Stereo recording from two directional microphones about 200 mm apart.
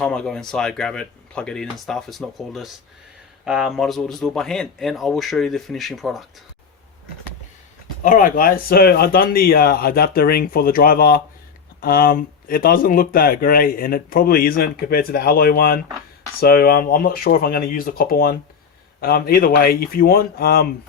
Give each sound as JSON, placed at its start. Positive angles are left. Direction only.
{"t": 0.0, "sound": "speech", "side_deg": 5}
{"t": 8.0, "sound": "speech", "side_deg": 40}